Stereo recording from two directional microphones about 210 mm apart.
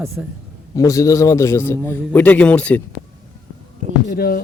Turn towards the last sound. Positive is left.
turn(degrees=45)  # may be behind; listen again after turning